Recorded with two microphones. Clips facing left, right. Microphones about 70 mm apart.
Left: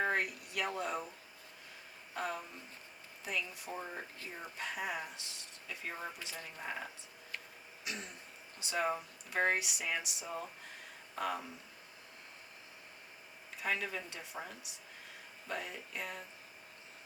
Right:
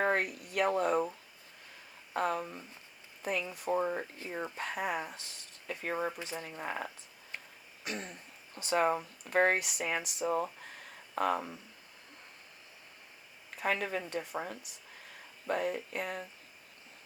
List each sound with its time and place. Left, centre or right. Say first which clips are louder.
0.0 s speech: right 4 dB; right
2.1 s speech: right 7 dB; right
7.9 s speech: right 4 dB; right
13.6 s speech: right 5 dB; right